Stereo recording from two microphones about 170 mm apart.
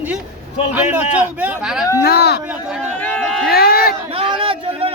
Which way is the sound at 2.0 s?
70° left (ahead or behind).